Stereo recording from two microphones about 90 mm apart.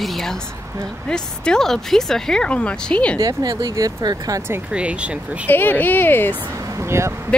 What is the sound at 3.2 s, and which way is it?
Speech, 45° right (ahead or behind).